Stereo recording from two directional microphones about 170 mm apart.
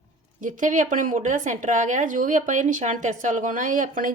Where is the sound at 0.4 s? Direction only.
50° right (ahead or behind).